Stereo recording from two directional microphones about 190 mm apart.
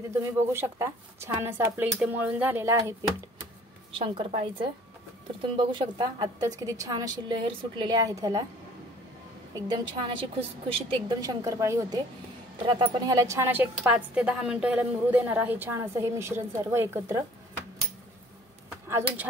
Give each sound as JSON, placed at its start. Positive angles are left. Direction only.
{"t": 0.1, "sound": "speech", "side_deg": -15}
{"t": 3.9, "sound": "a woman's voice", "side_deg": -30}
{"t": 9.5, "sound": "a woman's voice", "side_deg": -25}
{"t": 18.9, "sound": "speech", "side_deg": -15}